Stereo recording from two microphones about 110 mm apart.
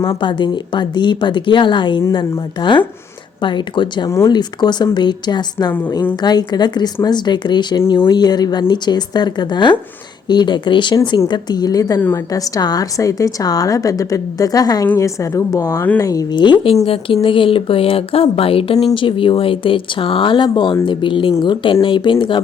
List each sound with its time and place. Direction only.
0.2 s a woman's voice: 45° left (ahead or behind)
16.3 s speech: 45° left (ahead or behind)
16.8 s speech: 55° left (ahead or behind)